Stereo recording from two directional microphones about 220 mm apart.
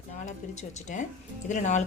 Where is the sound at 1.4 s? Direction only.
35° left (ahead or behind).